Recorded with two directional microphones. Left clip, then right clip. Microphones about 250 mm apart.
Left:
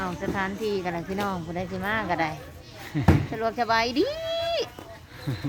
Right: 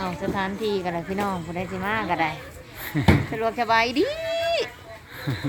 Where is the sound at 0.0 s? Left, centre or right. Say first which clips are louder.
Right 2 dB; right.